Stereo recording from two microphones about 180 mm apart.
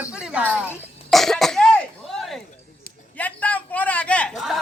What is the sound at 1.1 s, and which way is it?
Throat clearing, centre (ahead or behind).